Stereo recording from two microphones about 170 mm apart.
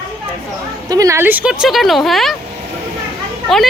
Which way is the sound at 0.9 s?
20° right (ahead or behind).